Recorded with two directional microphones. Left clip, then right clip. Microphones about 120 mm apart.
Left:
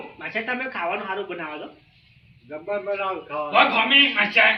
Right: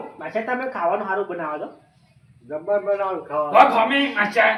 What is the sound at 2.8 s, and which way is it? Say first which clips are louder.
Speech: right 4 dB; 10° left (ahead or behind).